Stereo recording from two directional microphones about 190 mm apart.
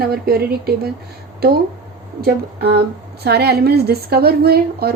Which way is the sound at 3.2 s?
60° right (ahead or behind).